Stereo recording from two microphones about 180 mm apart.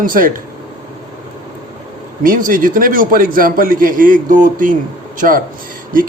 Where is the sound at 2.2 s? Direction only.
50° right (ahead or behind).